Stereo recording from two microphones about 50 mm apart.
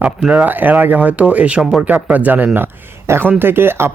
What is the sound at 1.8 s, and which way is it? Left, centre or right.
Speech, right.